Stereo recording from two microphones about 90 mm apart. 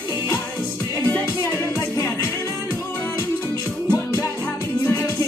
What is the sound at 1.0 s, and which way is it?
Music, 25° left (ahead or behind).